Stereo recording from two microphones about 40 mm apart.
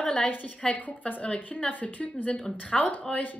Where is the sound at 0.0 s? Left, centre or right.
Left.